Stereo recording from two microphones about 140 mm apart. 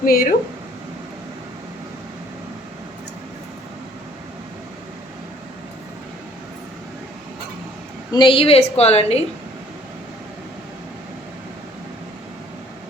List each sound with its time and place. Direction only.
0.0 s speech: 90° left
8.1 s a woman's voice: 35° left (ahead or behind)